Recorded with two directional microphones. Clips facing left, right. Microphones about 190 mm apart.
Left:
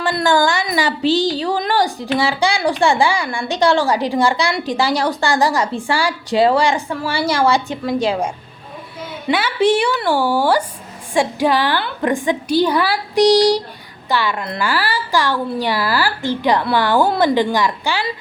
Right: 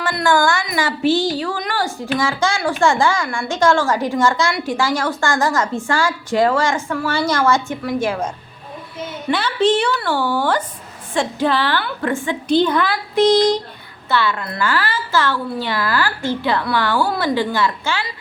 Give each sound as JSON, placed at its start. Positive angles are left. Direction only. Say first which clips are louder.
{"t": 0.0, "sound": "a woman's voice", "louder": "left 1 dB", "side_deg": 20}